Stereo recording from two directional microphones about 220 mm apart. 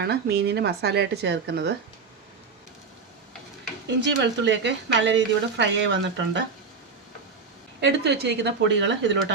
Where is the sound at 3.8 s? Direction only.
55° right (ahead or behind).